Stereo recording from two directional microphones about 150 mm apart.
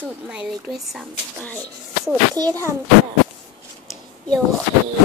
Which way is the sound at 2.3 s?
25° right (ahead or behind).